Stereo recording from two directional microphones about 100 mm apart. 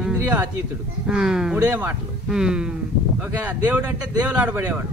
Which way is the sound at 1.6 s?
15° right (ahead or behind).